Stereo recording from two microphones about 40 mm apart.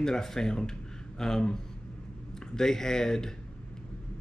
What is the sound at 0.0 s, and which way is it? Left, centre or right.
Speech, centre.